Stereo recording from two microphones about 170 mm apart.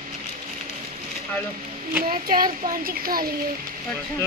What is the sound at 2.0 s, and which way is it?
A woman's voice, 55° right (ahead or behind).